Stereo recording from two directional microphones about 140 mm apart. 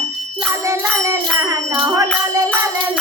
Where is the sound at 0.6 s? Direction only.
20° right (ahead or behind).